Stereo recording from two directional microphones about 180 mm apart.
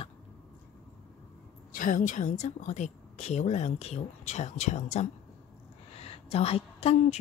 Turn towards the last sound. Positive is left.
turn(degrees=35)  # may be behind; listen again after turning